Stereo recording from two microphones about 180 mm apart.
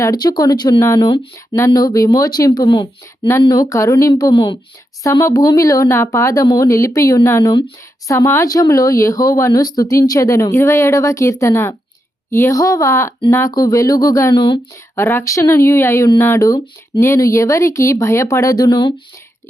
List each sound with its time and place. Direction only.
0.0 s speech: 20° left (ahead or behind)